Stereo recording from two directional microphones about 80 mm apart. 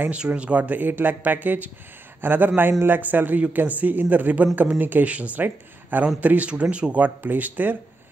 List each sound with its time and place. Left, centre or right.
0.1 s speech: centre